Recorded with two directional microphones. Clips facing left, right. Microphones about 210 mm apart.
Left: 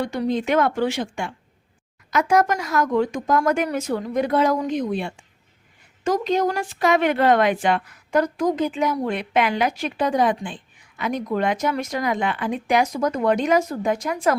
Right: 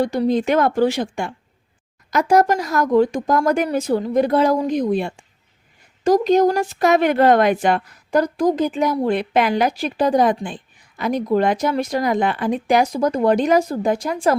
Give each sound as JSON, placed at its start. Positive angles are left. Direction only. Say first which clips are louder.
{"t": 0.0, "sound": "a woman's voice", "louder": "right 5 dB", "side_deg": -35}